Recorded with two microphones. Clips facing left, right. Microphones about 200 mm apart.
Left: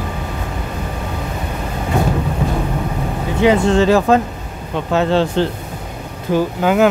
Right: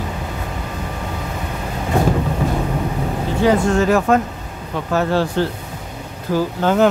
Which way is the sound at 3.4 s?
25° left (ahead or behind).